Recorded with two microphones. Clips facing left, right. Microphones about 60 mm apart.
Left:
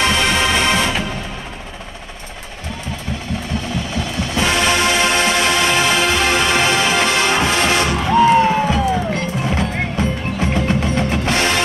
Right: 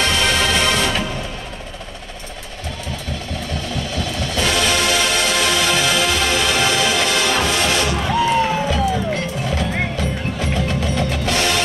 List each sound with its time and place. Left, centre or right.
0.0 s music: left
3.7 s music: left